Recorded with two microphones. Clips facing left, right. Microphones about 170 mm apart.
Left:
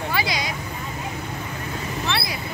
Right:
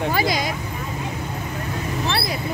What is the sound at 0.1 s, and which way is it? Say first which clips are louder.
Vehicle: right 4 dB; 45° right (ahead or behind).